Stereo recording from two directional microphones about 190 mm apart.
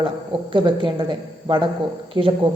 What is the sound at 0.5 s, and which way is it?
A woman's voice, 25° right (ahead or behind).